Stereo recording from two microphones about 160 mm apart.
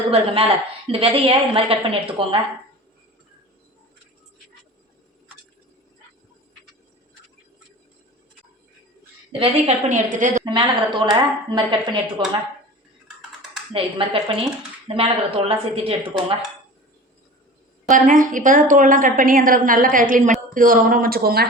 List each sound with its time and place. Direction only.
0.1 s a woman's voice: 35° right (ahead or behind)
9.4 s a woman's voice: 45° right (ahead or behind)
10.4 s a woman's voice: 30° right (ahead or behind)
13.7 s a woman's voice: 35° right (ahead or behind)
17.8 s a woman's voice: 55° right (ahead or behind); by 21.4 s 70° right (ahead or behind)